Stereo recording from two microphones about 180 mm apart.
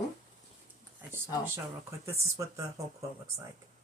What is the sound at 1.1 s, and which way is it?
Speech, 15° right (ahead or behind).